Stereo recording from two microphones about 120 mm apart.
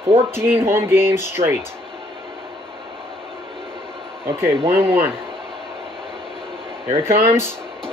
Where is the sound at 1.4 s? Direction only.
55° right (ahead or behind).